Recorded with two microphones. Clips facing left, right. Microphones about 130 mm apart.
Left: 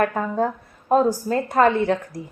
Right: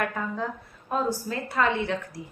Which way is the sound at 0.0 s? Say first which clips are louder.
Left 8 dB; 45° left (ahead or behind).